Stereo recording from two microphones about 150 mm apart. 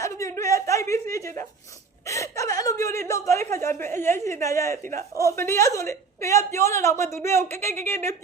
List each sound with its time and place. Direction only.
0.0 s a sound: 20° left (ahead or behind)
2.0 s chuckle: 20° left (ahead or behind)
4.9 s a woman's voice: 20° left (ahead or behind)